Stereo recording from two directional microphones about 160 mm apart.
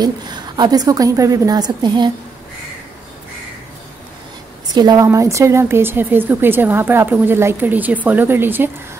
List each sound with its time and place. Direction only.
0.0 s a woman's voice: 25° right (ahead or behind)
4.7 s a woman's voice: 25° right (ahead or behind)